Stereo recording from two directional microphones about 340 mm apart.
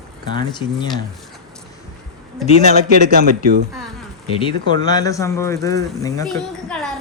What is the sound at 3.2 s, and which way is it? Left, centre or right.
Speech, right.